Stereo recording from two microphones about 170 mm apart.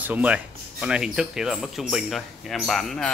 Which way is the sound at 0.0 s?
10° right (ahead or behind).